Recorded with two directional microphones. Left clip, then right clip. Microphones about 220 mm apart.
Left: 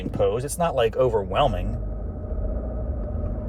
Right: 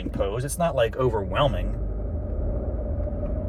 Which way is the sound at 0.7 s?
20° left (ahead or behind).